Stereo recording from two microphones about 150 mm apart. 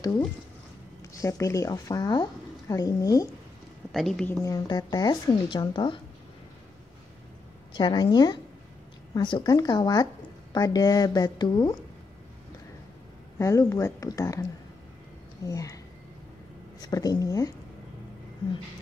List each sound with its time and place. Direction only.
1.1 s a woman's voice: 20° left (ahead or behind)
3.9 s a woman's voice: centre (ahead or behind)
4.3 s a woman's voice: 20° left (ahead or behind)
7.7 s a woman's voice: 30° left (ahead or behind)
13.4 s a woman's voice: 20° left (ahead or behind)
15.4 s a woman's voice: 20° left (ahead or behind)
16.8 s a woman's voice: 25° left (ahead or behind)